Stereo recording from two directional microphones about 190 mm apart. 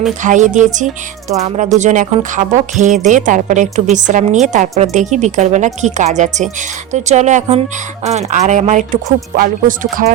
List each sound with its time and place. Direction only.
0.2 s speech: 40° right (ahead or behind)